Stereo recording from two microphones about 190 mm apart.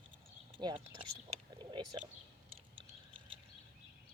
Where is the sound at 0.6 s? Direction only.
25° right (ahead or behind).